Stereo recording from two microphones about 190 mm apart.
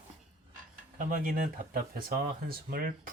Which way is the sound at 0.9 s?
45° right (ahead or behind).